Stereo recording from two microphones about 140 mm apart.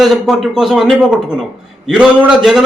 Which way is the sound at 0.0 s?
Centre (ahead or behind).